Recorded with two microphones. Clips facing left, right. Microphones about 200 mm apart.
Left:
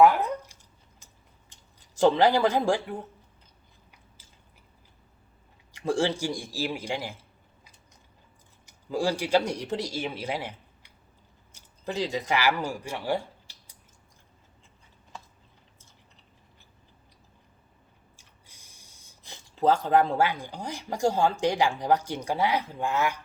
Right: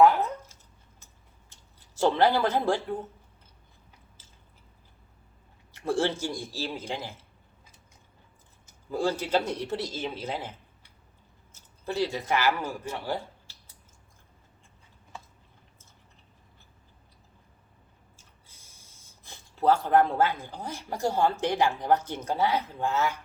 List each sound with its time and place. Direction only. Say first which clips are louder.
0.0 s a sound: left 1 dB; 15° left (ahead or behind)
5.8 s speech: left 1 dB; 10° left (ahead or behind)
8.9 s speech: left 2 dB; 15° left (ahead or behind)
11.5 s speech: right 1 dB; 15° left (ahead or behind)
18.2 s a sound: left 1 dB; 15° left (ahead or behind)
20.5 s speech: left 2 dB; 15° left (ahead or behind)